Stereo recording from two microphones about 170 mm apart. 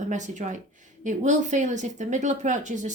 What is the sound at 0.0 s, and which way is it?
A woman's voice, 45° right (ahead or behind).